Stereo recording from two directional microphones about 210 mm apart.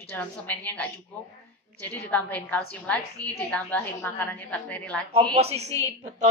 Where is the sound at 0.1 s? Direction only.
5° left (ahead or behind).